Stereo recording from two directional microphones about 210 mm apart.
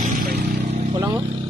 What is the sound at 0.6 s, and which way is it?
Vehicle, 30° right (ahead or behind).